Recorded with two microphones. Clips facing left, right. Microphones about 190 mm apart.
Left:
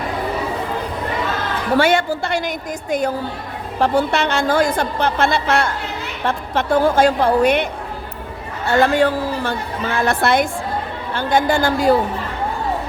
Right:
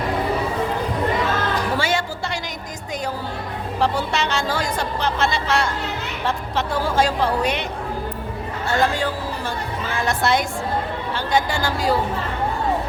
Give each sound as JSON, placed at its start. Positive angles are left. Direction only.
{"t": 1.8, "sound": "a woman's voice", "side_deg": 60}
{"t": 3.8, "sound": "a woman's voice", "side_deg": 55}